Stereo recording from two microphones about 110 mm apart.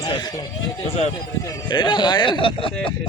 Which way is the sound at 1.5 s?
40° left (ahead or behind).